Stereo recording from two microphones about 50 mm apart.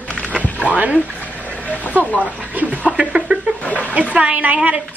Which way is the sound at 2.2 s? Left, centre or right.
Right.